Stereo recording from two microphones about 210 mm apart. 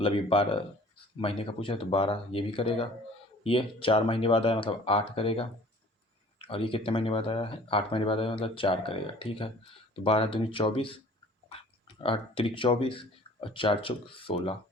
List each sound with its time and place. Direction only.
0.0 s speech: 25° left (ahead or behind)
12.0 s speech: 25° left (ahead or behind)